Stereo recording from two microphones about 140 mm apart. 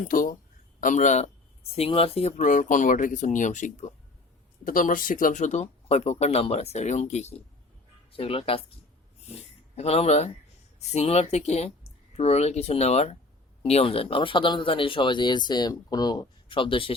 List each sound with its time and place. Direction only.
0.1 s speech: 85° left
0.8 s speech: 65° left (ahead or behind)
1.7 s speech: 45° left (ahead or behind)
2.5 s speech: 70° left (ahead or behind)
4.6 s speech: 75° left (ahead or behind); by 8.6 s 40° left (ahead or behind)
9.7 s speech: 50° left (ahead or behind)